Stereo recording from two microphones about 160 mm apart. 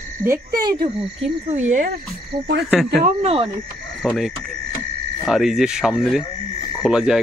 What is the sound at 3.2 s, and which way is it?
Speech, 35° right (ahead or behind).